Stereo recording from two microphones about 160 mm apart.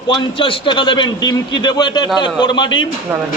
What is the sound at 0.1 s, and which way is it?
A man's voice, 30° left (ahead or behind).